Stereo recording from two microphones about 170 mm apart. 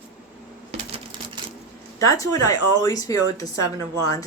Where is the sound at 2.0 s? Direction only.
20° left (ahead or behind).